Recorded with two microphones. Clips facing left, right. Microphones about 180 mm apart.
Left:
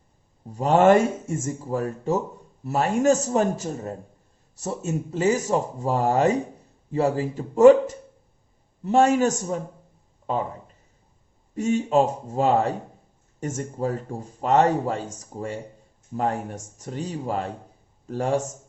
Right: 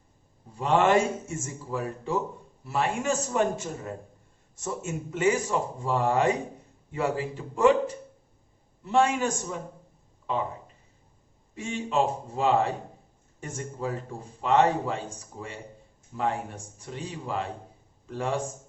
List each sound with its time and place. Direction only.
0.5 s a man's voice: 40° left (ahead or behind)
11.5 s a man's voice: 45° left (ahead or behind)